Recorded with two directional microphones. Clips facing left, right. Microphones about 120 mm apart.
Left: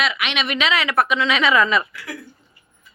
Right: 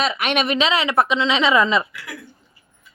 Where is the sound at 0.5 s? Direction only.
30° right (ahead or behind).